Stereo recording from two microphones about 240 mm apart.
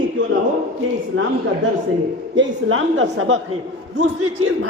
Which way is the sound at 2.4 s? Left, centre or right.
Right.